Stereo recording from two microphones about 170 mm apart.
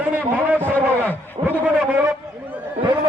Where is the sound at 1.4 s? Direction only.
35° right (ahead or behind).